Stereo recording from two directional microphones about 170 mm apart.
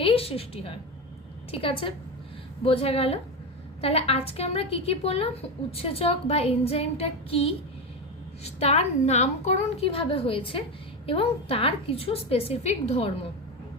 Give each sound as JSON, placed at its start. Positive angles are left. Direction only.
{"t": 0.0, "sound": "a woman's voice", "side_deg": 35}